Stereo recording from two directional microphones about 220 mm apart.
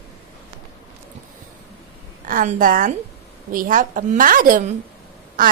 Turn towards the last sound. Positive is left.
turn(degrees=-40)  # may be behind; listen again after turning